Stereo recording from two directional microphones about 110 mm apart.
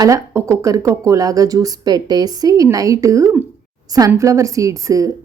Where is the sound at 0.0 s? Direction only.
30° right (ahead or behind).